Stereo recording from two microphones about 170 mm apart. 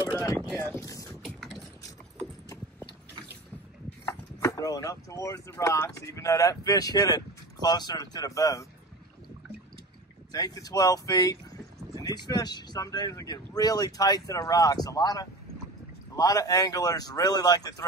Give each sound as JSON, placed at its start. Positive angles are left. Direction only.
{"t": 0.1, "sound": "boat", "side_deg": 20}
{"t": 0.6, "sound": "a sound", "side_deg": 20}
{"t": 1.2, "sound": "vehicle", "side_deg": 0}
{"t": 4.0, "sound": "speech", "side_deg": 15}
{"t": 10.3, "sound": "speech", "side_deg": 20}